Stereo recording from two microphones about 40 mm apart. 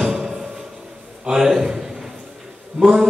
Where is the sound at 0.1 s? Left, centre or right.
Centre.